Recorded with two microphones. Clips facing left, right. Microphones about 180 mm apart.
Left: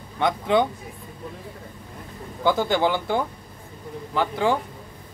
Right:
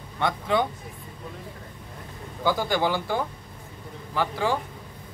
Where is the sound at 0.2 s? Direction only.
20° left (ahead or behind).